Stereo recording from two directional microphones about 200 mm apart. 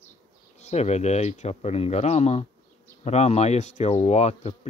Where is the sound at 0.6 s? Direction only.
35° left (ahead or behind).